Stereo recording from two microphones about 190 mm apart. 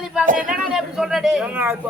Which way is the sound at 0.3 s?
45° right (ahead or behind).